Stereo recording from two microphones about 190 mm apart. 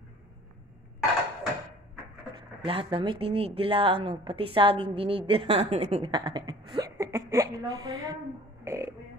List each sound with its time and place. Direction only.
2.6 s a woman's voice: 25° right (ahead or behind)
8.6 s music: 15° right (ahead or behind)